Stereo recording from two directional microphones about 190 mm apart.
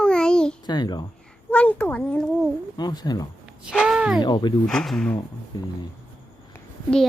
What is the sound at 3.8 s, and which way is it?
Speech, 5° right (ahead or behind).